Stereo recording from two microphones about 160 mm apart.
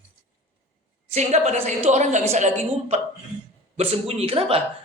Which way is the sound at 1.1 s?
45° right (ahead or behind).